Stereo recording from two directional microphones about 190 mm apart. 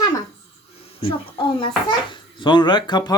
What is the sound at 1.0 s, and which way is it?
A child's voice, 25° left (ahead or behind).